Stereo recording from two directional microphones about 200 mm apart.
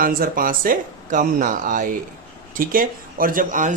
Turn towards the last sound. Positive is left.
turn(degrees=-40)  # may be behind; listen again after turning